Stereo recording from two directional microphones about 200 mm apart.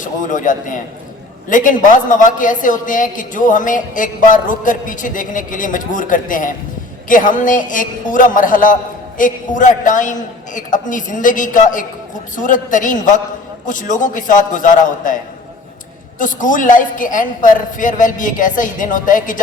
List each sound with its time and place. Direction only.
0.0 s a woman's voice: 40° left (ahead or behind)
16.1 s a woman's voice: 40° left (ahead or behind)